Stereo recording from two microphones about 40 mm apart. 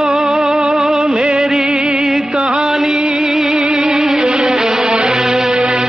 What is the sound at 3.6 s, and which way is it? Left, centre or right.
Music, centre.